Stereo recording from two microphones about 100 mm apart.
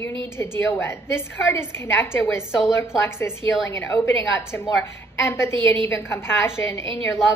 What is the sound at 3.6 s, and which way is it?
A woman's voice, 30° left (ahead or behind).